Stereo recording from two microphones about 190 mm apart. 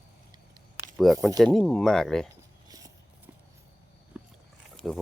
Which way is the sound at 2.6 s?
20° right (ahead or behind).